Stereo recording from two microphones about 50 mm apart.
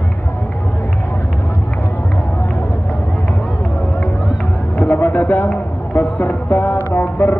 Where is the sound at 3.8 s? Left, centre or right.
Left.